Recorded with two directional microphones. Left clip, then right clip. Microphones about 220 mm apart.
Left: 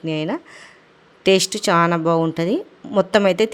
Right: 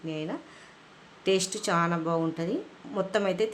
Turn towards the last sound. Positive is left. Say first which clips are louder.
# left 11 dB
turn(degrees=40)  # may be behind; listen again after turning